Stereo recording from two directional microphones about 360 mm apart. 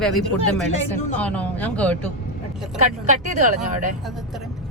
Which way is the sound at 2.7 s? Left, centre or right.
Centre.